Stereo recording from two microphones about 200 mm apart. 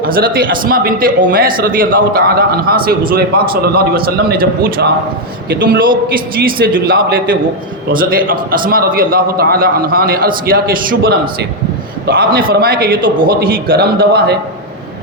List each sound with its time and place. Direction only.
0.0 s a man's voice: 45° right (ahead or behind)
6.6 s a man's voice: 50° right (ahead or behind)